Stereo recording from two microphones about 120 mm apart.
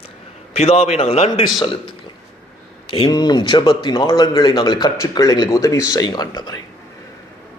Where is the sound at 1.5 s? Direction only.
45° left (ahead or behind).